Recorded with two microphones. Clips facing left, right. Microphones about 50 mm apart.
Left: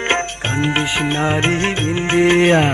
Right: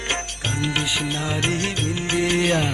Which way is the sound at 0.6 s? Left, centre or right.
Left.